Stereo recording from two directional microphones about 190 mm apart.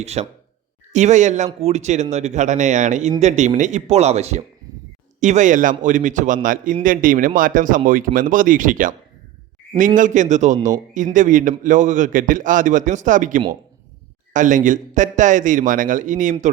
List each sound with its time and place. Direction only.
0.0 s a man's voice: 35° right (ahead or behind)